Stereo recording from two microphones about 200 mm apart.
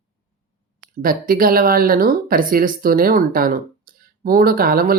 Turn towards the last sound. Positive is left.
turn(degrees=-45)  # may be behind; listen again after turning